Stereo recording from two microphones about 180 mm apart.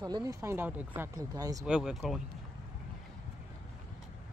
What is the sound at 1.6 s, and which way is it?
Speech, 5° right (ahead or behind).